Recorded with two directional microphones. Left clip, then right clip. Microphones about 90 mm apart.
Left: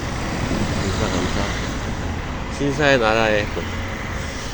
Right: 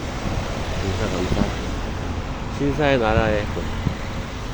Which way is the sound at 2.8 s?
45° right (ahead or behind).